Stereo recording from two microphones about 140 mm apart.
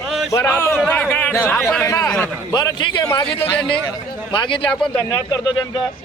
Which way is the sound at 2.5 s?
30° left (ahead or behind).